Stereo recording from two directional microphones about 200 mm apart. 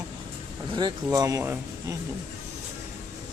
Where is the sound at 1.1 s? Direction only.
15° right (ahead or behind).